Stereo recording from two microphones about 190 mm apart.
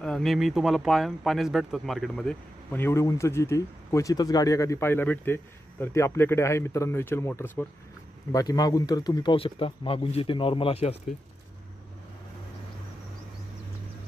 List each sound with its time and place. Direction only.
0.0 s speech: centre (ahead or behind); by 11.0 s 30° left (ahead or behind)